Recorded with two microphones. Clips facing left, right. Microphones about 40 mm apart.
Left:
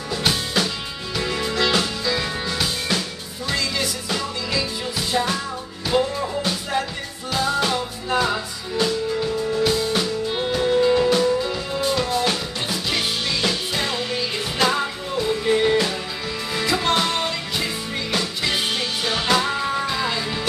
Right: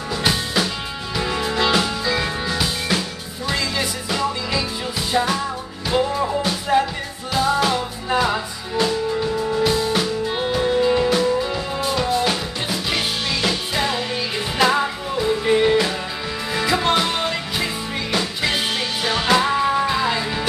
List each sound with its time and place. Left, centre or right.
0.1 s music: centre
19.0 s music: centre